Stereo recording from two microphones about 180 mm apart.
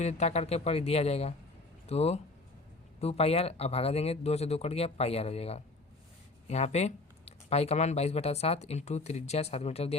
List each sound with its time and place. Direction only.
0.0 s speech: 40° left (ahead or behind)